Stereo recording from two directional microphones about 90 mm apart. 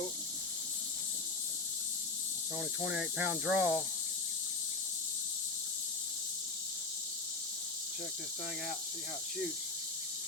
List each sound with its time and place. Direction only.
2.8 s speech: 15° right (ahead or behind)